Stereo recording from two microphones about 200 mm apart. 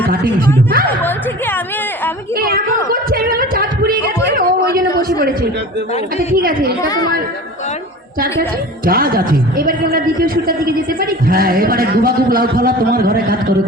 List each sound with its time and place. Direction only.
0.1 s a woman's voice: 45° right (ahead or behind)
2.3 s a sound: 50° right (ahead or behind)
6.3 s a woman's voice: 45° right (ahead or behind)
6.8 s speech: 20° left (ahead or behind)
8.2 s a woman's voice: 45° right (ahead or behind)